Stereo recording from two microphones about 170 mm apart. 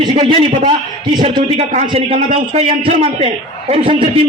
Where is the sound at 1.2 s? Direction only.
40° right (ahead or behind).